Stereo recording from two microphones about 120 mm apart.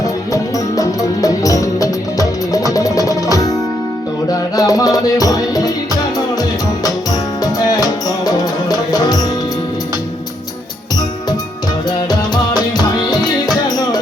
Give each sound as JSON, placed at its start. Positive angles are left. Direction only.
{"t": 0.0, "sound": "music", "side_deg": 30}
{"t": 11.9, "sound": "music", "side_deg": 35}